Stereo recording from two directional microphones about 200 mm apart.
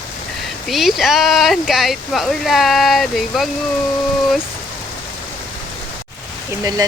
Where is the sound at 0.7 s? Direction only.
Centre (ahead or behind).